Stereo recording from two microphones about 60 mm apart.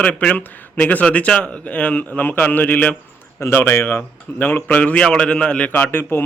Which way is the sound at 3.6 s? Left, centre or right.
Left.